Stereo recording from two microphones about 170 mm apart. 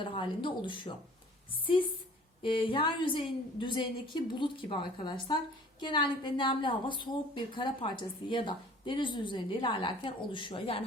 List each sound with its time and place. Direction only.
0.0 s a woman's voice: 30° left (ahead or behind)
2.4 s a woman's voice: 30° left (ahead or behind)